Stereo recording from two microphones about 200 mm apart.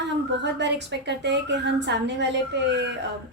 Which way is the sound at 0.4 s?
60° right (ahead or behind).